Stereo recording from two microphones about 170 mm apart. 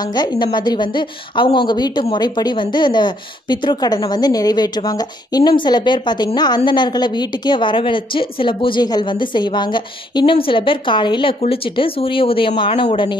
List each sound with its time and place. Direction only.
0.0 s a woman's voice: 25° left (ahead or behind)